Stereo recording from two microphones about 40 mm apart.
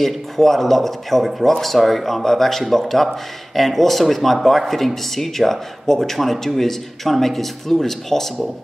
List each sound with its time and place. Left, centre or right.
0.0 s speech: centre